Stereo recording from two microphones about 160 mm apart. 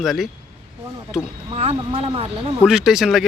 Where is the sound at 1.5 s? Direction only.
35° right (ahead or behind).